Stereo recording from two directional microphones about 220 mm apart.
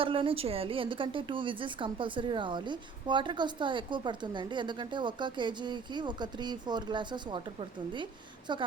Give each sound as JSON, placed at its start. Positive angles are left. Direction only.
{"t": 0.0, "sound": "a woman's voice", "side_deg": -25}